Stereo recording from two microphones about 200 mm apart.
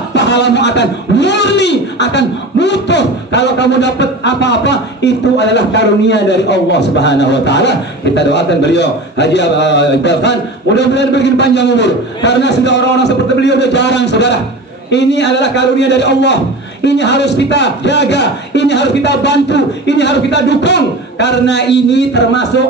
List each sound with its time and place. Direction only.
0.1 s a man's voice: 60° left (ahead or behind)